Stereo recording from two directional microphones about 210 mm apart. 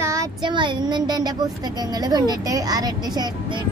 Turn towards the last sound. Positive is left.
turn(degrees=-20)  # may be behind; listen again after turning